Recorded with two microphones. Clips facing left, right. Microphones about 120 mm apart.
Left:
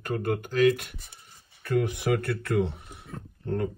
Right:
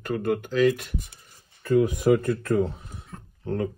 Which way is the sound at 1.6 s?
70° left (ahead or behind).